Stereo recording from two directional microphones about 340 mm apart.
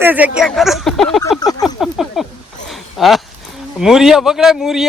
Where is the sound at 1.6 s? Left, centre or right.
Centre.